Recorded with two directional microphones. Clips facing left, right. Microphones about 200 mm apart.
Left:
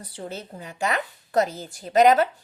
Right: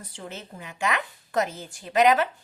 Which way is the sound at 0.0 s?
35° left (ahead or behind).